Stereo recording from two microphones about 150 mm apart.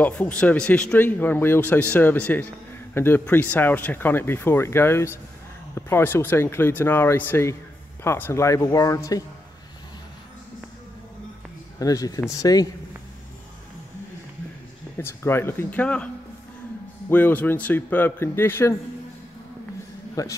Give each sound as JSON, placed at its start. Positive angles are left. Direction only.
{"t": 0.0, "sound": "speech", "side_deg": 10}
{"t": 11.8, "sound": "speech", "side_deg": 25}
{"t": 15.0, "sound": "speech", "side_deg": 15}
{"t": 17.1, "sound": "speech", "side_deg": 10}
{"t": 20.2, "sound": "speech", "side_deg": 25}